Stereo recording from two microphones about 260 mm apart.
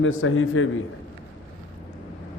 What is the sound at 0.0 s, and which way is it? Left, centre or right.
Speech, left.